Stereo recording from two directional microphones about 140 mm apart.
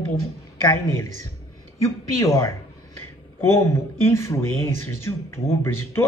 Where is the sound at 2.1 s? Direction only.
20° left (ahead or behind).